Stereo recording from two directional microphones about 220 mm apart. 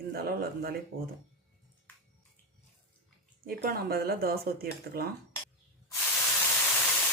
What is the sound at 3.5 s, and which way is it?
Speech, 45° right (ahead or behind).